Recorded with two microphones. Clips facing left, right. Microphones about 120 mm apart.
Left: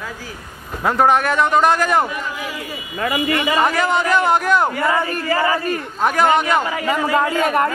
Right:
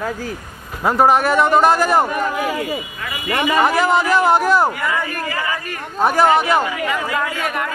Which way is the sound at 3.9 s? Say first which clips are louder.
Right 2 dB; 35° right (ahead or behind).